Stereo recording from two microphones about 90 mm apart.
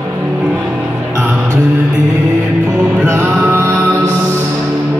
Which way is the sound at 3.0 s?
25° right (ahead or behind).